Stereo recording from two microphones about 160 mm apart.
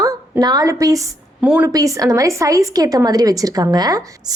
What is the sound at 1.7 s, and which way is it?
A woman's voice, 20° right (ahead or behind).